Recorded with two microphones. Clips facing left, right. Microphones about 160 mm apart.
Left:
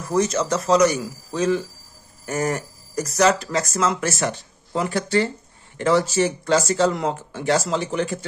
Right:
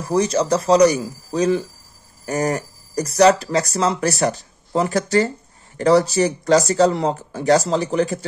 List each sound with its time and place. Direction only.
0.1 s speech: 35° right (ahead or behind)